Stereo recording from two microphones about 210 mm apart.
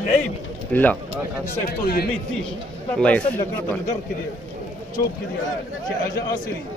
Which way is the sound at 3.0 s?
5° left (ahead or behind).